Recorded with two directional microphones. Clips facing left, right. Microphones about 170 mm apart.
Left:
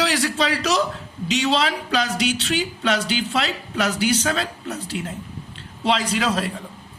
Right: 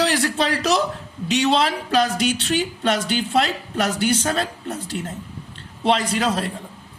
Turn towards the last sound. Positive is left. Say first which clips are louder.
# right 1 dB
turn(degrees=-55)  # may be behind; listen again after turning